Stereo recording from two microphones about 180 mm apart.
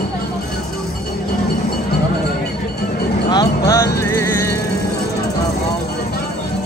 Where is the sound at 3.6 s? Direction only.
20° left (ahead or behind).